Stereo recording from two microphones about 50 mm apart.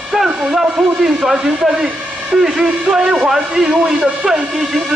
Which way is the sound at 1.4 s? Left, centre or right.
Centre.